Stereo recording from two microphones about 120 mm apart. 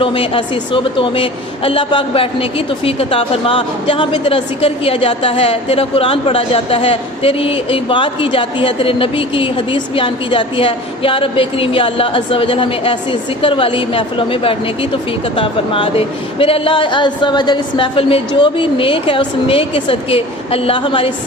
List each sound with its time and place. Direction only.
0.0 s a woman's voice: 45° left (ahead or behind)